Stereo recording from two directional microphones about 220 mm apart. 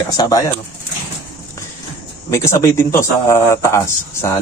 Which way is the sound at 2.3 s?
10° left (ahead or behind).